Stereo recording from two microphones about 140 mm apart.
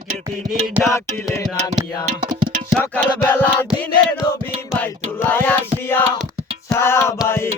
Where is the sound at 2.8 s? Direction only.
15° left (ahead or behind).